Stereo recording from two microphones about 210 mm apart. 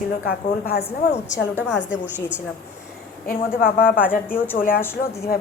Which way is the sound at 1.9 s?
5° right (ahead or behind).